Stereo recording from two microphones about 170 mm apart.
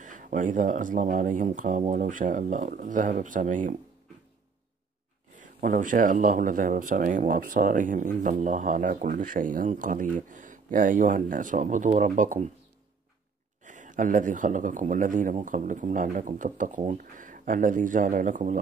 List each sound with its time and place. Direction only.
0.0 s speech: 50° right (ahead or behind)
5.4 s speech: 50° right (ahead or behind)
13.7 s speech: 50° right (ahead or behind)